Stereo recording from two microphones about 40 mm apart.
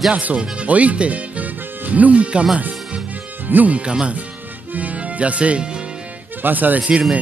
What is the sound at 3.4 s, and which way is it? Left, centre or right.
Speech, right.